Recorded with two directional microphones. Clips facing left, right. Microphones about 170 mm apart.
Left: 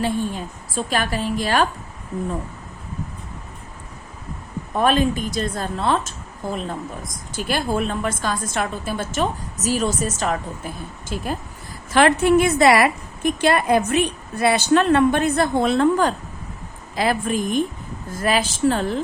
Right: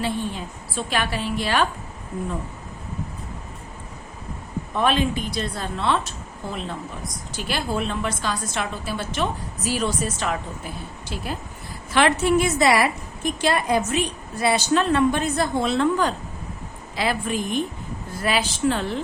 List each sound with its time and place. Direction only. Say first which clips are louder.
0.0 s a woman's voice: left 3 dB; 45° left (ahead or behind)
4.7 s a woman's voice: left 3 dB; 45° left (ahead or behind)